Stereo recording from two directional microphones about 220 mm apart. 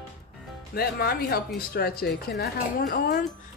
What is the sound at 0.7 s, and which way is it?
A woman's voice, 45° left (ahead or behind).